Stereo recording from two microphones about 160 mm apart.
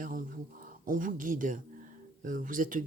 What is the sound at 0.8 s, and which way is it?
Speech, 55° right (ahead or behind).